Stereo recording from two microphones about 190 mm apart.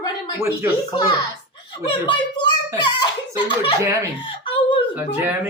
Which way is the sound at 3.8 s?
15° right (ahead or behind).